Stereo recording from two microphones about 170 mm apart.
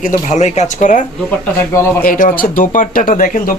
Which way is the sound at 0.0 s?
45° left (ahead or behind).